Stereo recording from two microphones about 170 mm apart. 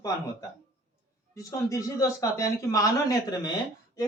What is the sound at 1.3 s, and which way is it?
Speech, 20° left (ahead or behind).